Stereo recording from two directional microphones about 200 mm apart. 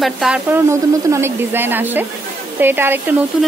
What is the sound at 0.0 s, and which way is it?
A woman's voice, 5° right (ahead or behind).